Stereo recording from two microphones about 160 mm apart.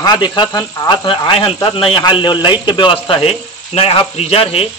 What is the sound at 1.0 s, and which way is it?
Speech, 35° left (ahead or behind).